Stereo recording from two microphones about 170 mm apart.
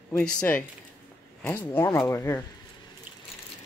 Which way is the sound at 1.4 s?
15° left (ahead or behind).